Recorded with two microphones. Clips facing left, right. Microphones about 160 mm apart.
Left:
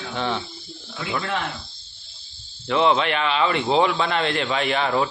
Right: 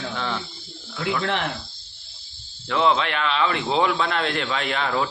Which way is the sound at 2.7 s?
5° left (ahead or behind).